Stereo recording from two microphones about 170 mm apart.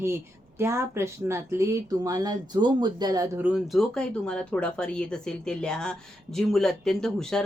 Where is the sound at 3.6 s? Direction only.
Centre (ahead or behind).